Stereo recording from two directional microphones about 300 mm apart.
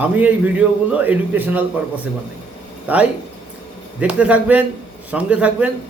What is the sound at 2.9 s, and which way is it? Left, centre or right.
A man's voice, centre.